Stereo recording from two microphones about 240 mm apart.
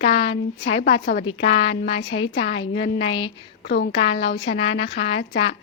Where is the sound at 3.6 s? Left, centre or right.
Left.